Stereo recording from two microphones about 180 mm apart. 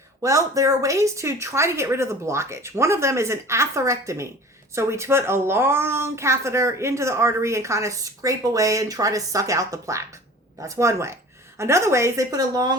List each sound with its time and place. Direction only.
0.2 s a woman's voice: 15° right (ahead or behind)